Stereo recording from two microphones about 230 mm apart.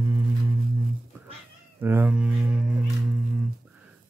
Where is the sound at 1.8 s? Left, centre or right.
Centre.